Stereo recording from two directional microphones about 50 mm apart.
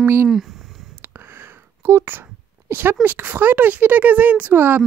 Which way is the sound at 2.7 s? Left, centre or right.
Right.